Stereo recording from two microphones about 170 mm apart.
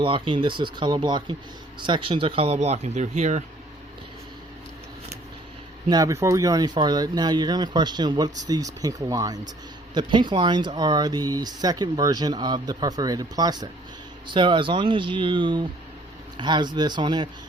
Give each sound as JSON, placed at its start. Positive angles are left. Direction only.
{"t": 0.0, "sound": "speech", "side_deg": -30}
{"t": 5.9, "sound": "speech", "side_deg": -20}